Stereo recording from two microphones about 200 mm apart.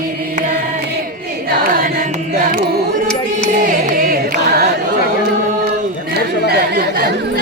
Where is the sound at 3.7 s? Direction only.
40° right (ahead or behind).